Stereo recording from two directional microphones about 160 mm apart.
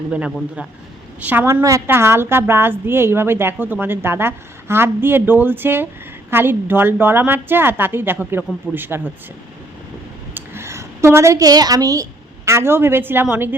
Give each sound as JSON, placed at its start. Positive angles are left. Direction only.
{"t": 0.1, "sound": "a woman's voice", "side_deg": -10}
{"t": 10.3, "sound": "a sound", "side_deg": -15}
{"t": 12.5, "sound": "a woman's voice", "side_deg": -15}